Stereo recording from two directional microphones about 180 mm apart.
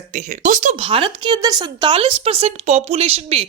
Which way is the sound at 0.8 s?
30° right (ahead or behind).